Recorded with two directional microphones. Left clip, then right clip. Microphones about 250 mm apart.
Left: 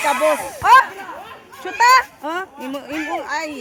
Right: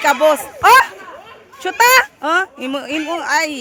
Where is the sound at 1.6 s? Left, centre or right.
Right.